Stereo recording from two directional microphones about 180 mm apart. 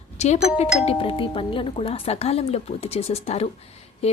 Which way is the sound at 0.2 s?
40° left (ahead or behind).